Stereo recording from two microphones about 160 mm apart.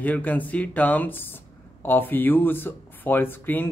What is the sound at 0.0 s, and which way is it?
Speech, 10° left (ahead or behind).